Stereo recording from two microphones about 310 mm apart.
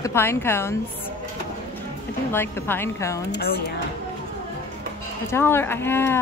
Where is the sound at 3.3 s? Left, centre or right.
Left.